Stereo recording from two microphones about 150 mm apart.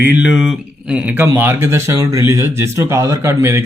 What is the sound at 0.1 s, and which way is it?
Speech, 5° right (ahead or behind).